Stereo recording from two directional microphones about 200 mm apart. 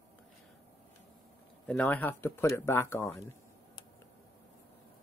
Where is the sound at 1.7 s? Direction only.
10° left (ahead or behind).